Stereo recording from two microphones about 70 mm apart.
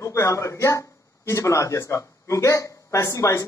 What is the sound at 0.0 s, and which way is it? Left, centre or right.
A man's voice, left.